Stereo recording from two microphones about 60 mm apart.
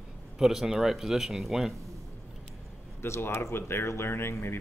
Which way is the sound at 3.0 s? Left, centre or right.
Left.